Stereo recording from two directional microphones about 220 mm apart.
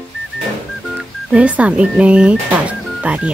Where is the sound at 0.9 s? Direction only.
5° right (ahead or behind).